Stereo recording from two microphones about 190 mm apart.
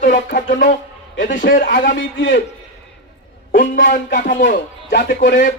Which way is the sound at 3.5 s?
45° left (ahead or behind).